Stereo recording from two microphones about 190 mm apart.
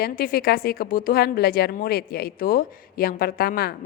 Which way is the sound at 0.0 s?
55° left (ahead or behind).